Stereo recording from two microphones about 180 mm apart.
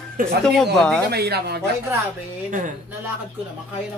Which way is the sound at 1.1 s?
65° right (ahead or behind).